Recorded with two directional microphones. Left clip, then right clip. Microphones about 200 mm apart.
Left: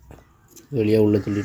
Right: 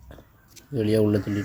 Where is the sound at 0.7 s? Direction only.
10° left (ahead or behind).